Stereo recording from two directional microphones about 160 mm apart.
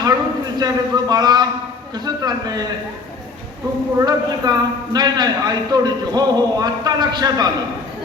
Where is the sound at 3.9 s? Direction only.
25° right (ahead or behind).